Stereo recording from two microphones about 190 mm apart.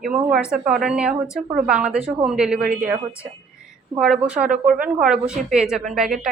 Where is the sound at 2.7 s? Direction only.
50° right (ahead or behind).